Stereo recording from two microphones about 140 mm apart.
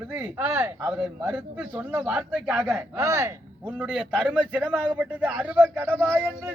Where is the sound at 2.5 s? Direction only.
20° right (ahead or behind).